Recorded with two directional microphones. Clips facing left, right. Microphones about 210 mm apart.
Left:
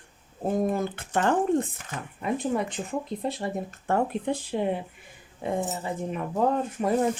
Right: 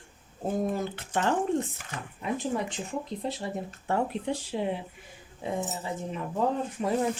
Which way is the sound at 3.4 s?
60° left (ahead or behind).